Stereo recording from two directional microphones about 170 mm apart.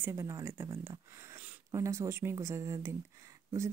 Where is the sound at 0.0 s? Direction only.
15° right (ahead or behind).